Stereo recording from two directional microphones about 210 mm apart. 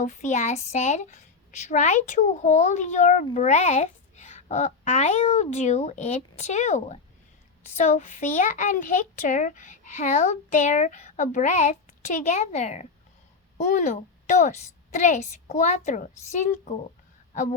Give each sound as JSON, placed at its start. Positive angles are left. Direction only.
{"t": 0.0, "sound": "a child's voice", "side_deg": 35}